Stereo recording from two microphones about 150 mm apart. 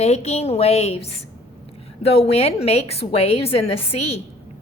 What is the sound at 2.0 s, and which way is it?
A woman's voice, 40° left (ahead or behind).